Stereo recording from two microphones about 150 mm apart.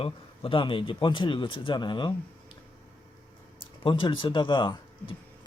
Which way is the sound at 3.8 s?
35° left (ahead or behind).